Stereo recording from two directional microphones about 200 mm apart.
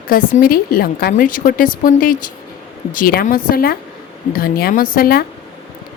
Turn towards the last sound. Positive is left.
turn(degrees=50)  # may be behind; listen again after turning